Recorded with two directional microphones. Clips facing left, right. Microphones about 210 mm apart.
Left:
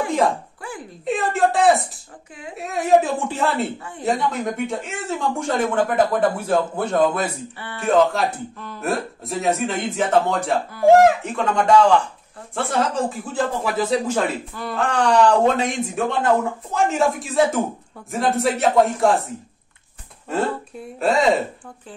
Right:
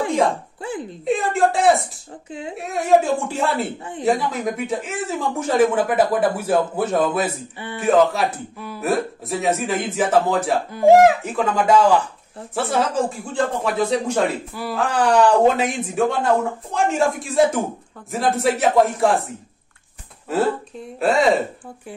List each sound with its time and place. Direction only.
0.6 s speech: 20° right (ahead or behind)
1.0 s speech: centre (ahead or behind)
7.5 s speech: 15° right (ahead or behind)
8.1 s speech: 5° right (ahead or behind)